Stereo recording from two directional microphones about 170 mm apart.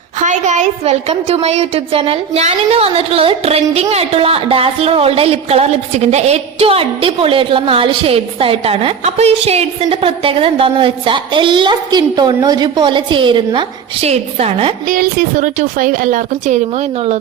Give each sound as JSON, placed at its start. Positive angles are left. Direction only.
{"t": 0.2, "sound": "a woman's voice", "side_deg": -45}
{"t": 14.8, "sound": "speech", "side_deg": -55}